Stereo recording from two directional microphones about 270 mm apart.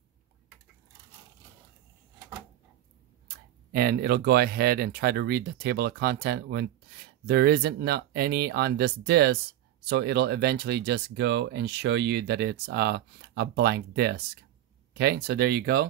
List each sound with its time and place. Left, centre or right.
3.7 s speech: right